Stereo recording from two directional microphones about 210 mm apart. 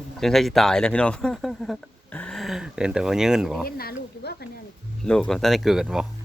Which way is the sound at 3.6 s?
45° left (ahead or behind).